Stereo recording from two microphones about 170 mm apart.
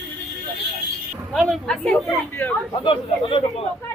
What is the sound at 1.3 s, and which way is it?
A woman's voice, 5° left (ahead or behind).